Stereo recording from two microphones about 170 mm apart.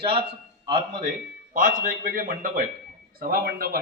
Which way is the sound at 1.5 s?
55° right (ahead or behind).